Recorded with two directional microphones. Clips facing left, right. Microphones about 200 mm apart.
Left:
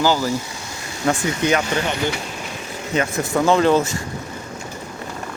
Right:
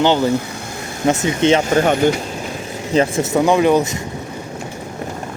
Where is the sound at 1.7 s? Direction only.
50° right (ahead or behind).